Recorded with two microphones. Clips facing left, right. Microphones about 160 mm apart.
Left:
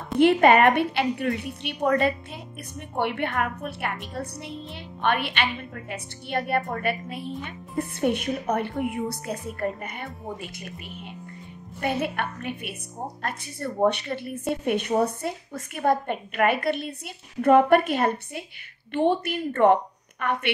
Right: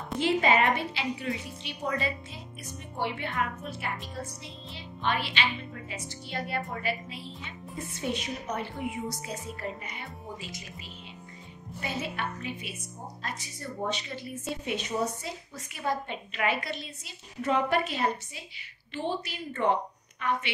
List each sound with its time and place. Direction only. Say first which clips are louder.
0.2 s a woman's voice: left 8 dB; 60° left (ahead or behind)
11.8 s a woman's voice: left 7 dB; 60° left (ahead or behind)